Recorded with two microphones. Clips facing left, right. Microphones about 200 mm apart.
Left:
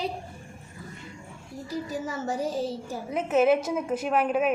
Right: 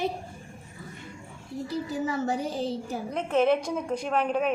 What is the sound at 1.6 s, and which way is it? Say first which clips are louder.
A child's voice: right 2 dB; 65° right (ahead or behind).